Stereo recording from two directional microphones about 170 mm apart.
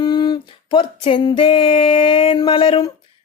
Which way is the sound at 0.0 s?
25° left (ahead or behind).